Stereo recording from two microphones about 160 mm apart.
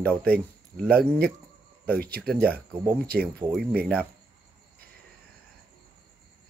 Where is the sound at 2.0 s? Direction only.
75° right (ahead or behind).